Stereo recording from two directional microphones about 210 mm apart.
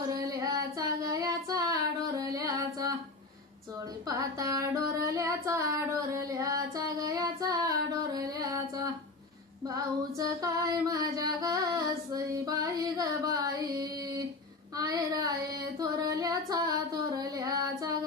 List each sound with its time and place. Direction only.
0.1 s a sound: 15° right (ahead or behind)
0.7 s female singing: 15° right (ahead or behind)
4.1 s child singing: 15° right (ahead or behind)
9.7 s music: 15° right (ahead or behind)
14.8 s a sound: 15° right (ahead or behind)
15.8 s female singing: 15° right (ahead or behind)